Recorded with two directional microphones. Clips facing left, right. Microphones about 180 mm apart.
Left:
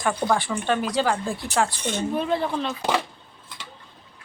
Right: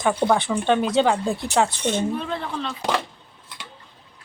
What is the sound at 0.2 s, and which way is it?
Speech, 15° right (ahead or behind).